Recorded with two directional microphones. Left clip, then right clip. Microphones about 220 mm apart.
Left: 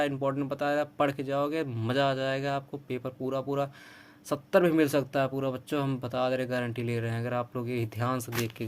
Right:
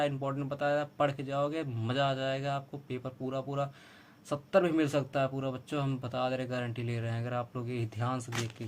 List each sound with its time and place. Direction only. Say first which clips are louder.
0.0 s speech: left 4 dB; 35° left (ahead or behind)